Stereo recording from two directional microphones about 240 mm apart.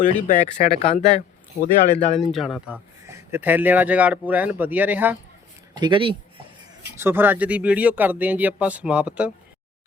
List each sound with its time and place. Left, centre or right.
0.3 s speech: left
2.3 s speech: centre
5.7 s speech: centre
6.9 s speech: centre